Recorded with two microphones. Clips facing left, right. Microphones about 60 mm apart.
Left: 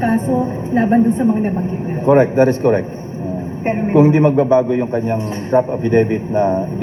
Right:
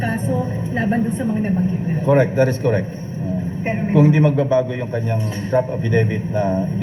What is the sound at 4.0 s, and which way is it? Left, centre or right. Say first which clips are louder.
A man's voice: left 4 dB; left.